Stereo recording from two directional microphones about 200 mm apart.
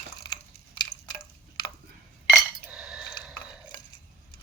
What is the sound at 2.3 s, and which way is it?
Cutlery, 5° right (ahead or behind).